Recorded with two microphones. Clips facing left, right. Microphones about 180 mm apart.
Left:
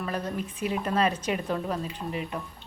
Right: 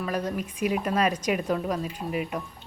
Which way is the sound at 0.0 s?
10° right (ahead or behind).